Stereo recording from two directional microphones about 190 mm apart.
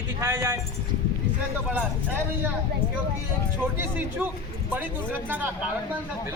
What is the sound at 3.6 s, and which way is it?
A man's voice, 10° right (ahead or behind).